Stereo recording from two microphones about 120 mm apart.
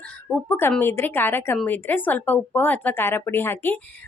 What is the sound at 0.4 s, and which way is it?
A woman's voice, 20° left (ahead or behind).